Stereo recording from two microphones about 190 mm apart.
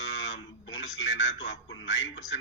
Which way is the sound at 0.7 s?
75° left (ahead or behind).